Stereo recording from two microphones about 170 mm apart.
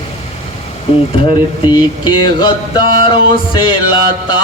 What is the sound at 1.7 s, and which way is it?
Music, 25° left (ahead or behind).